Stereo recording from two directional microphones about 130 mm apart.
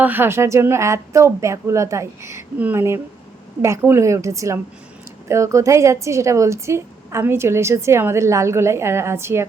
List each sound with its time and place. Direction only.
0.0 s a woman's voice: 15° right (ahead or behind)